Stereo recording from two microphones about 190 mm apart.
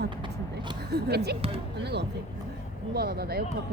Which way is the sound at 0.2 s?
25° right (ahead or behind).